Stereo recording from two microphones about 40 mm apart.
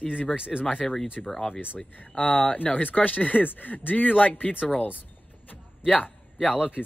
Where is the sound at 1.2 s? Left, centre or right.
Centre.